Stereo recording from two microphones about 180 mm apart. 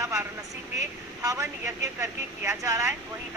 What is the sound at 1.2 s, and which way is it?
Speech, 15° right (ahead or behind).